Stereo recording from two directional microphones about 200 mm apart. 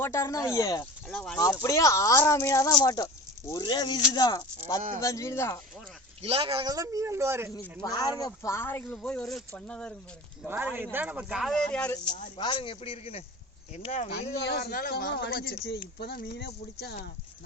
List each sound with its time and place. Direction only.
0.0 s speech: 15° left (ahead or behind)
1.0 s speech: 5° left (ahead or behind)
1.5 s a man's voice: 15° left (ahead or behind)
6.2 s speech: 30° right (ahead or behind); by 7.5 s 15° right (ahead or behind)
7.8 s speech: 20° left (ahead or behind)
10.4 s speech: 10° right (ahead or behind)
12.4 s a man's voice: 25° left (ahead or behind)
14.4 s speech: 55° left (ahead or behind)